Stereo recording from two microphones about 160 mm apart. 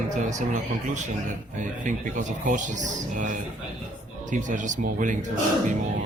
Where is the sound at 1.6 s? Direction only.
55° right (ahead or behind).